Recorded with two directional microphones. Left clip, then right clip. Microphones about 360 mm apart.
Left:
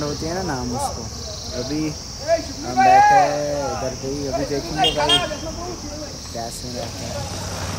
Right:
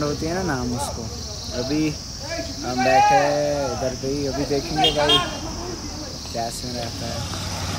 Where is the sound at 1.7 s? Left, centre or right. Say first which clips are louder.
Right 4 dB; centre.